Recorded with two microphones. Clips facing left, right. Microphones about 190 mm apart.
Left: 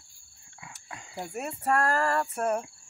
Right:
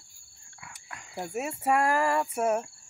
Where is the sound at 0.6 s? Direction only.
20° left (ahead or behind).